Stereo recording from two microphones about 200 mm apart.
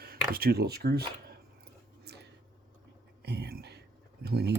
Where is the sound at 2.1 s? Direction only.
55° right (ahead or behind).